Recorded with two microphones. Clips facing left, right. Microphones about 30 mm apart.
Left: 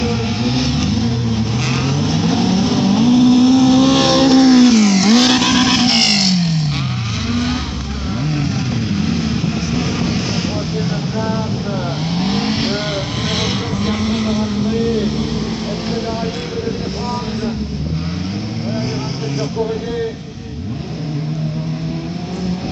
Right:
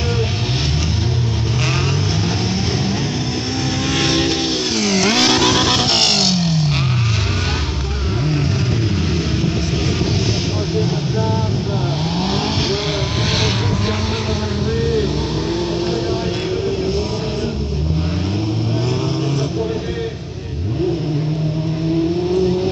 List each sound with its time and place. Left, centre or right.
2.7 s vehicle: left
4.0 s vehicle: centre
4.8 s vehicle: right
12.2 s vehicle: left